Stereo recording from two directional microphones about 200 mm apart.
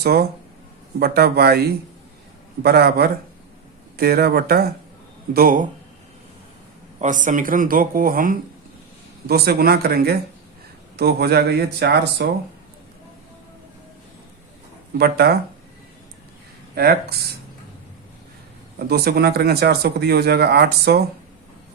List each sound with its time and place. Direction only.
0.0 s speech: 50° right (ahead or behind)
2.6 s speech: 50° right (ahead or behind)
7.0 s speech: 40° right (ahead or behind); by 12.3 s 60° right (ahead or behind)
14.9 s speech: 50° right (ahead or behind)
16.7 s speech: 50° right (ahead or behind)
18.9 s speech: 50° right (ahead or behind)